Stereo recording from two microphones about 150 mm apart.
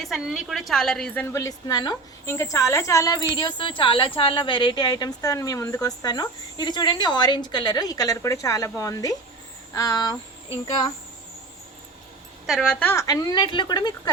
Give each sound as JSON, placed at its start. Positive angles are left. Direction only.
{"t": 0.0, "sound": "a woman's voice", "side_deg": 0}
{"t": 12.5, "sound": "a woman's voice", "side_deg": 5}